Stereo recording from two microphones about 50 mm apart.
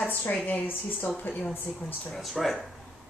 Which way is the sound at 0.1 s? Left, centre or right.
Left.